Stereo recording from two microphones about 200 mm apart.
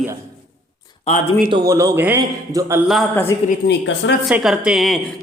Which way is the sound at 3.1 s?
10° left (ahead or behind).